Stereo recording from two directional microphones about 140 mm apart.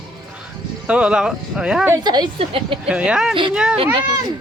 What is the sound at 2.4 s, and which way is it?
Speech, 40° right (ahead or behind).